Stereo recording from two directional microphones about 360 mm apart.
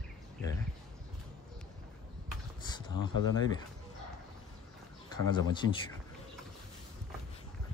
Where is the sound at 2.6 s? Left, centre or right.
Centre.